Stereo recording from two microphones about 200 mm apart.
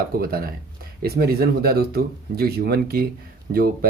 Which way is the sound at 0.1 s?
50° right (ahead or behind).